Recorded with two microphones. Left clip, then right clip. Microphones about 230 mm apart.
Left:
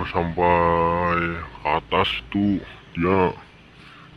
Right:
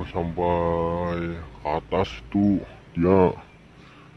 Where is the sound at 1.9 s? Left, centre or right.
Centre.